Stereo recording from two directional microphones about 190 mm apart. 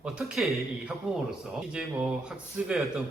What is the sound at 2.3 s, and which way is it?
Speech, centre (ahead or behind).